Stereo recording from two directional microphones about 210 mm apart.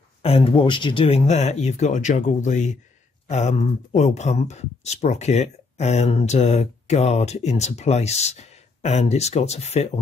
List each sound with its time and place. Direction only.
0.2 s speech: 30° left (ahead or behind)